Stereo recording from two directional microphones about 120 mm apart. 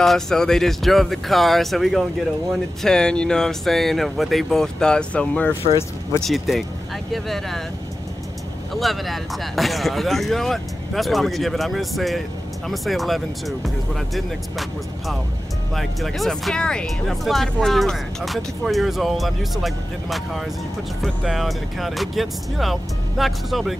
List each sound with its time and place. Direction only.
0.0 s speech: 5° left (ahead or behind)
5.6 s speech: 55° left (ahead or behind)
6.2 s speech: centre (ahead or behind)
8.7 s speech: centre (ahead or behind)